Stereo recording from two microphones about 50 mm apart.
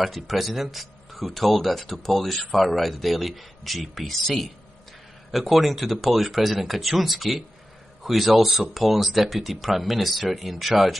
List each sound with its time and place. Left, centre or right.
0.0 s speech: centre